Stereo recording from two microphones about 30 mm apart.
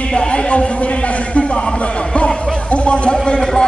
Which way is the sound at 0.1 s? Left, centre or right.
Left.